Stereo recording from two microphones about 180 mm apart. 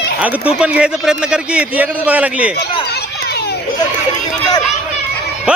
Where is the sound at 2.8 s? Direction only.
65° left (ahead or behind).